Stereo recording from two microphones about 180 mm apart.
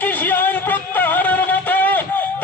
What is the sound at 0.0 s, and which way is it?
Music, 10° left (ahead or behind).